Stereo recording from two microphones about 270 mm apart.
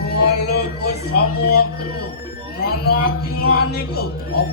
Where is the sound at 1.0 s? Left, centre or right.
Left.